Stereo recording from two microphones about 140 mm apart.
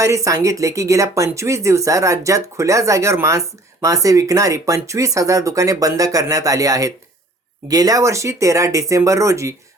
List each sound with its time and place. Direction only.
0.0 s speech: 20° right (ahead or behind)